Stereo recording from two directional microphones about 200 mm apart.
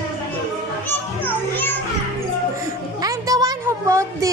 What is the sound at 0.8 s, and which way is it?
Children playing, 10° left (ahead or behind).